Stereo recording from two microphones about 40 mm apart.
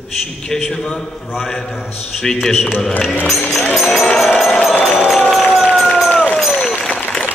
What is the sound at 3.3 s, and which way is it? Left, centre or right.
Music, centre.